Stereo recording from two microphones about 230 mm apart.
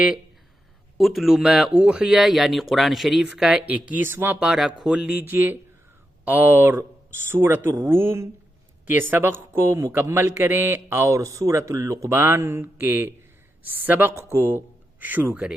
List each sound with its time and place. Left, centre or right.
0.9 s a man's voice: centre